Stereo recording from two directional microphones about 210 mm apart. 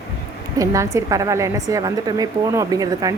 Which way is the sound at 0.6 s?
15° right (ahead or behind).